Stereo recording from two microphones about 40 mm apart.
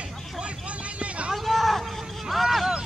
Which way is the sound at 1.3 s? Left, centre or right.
Centre.